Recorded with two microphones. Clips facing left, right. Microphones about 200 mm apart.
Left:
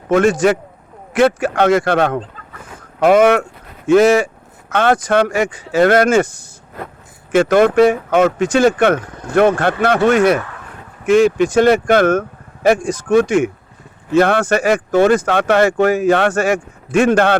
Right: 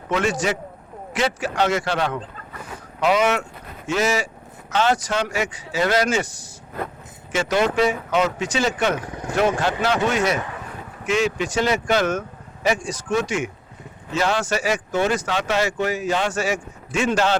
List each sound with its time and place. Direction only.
0.1 s speech: 50° left (ahead or behind)
9.0 s speech: 10° right (ahead or behind)
9.3 s speech: 55° left (ahead or behind)